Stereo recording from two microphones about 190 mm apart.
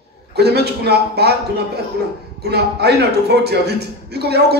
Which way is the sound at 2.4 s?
60° right (ahead or behind).